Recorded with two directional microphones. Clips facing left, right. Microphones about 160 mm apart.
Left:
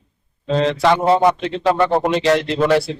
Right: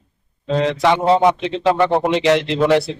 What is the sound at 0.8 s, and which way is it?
A man's voice, 15° right (ahead or behind).